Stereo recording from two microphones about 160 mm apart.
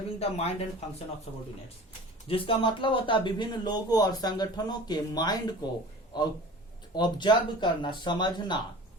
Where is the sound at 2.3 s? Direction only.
30° left (ahead or behind).